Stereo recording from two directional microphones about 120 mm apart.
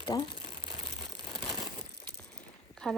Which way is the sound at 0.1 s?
35° left (ahead or behind).